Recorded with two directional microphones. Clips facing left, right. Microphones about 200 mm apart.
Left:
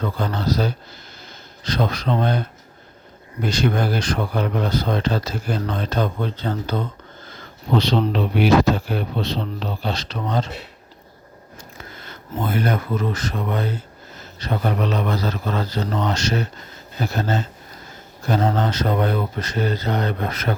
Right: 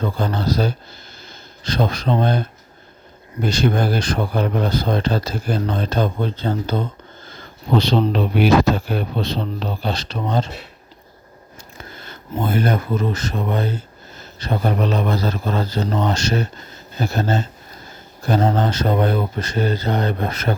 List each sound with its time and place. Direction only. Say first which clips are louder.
0.0 s speech: right 2 dB; 30° right (ahead or behind)
3.4 s speech: right 2 dB; 30° right (ahead or behind)
8.1 s speech: even; 45° right (ahead or behind); by 10.5 s 25° right (ahead or behind)
11.5 s speech: right 1 dB; 30° right (ahead or behind)